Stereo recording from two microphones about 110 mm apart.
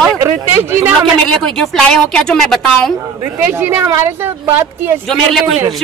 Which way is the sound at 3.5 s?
20° right (ahead or behind).